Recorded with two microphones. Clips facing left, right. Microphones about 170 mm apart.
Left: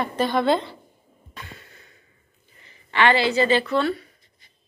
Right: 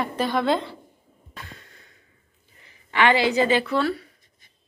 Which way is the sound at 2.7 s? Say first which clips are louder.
Even; 10° right (ahead or behind).